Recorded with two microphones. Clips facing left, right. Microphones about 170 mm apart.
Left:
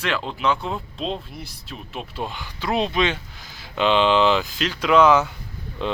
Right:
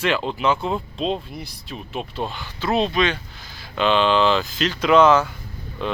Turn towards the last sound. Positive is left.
turn(degrees=20)  # may be behind; listen again after turning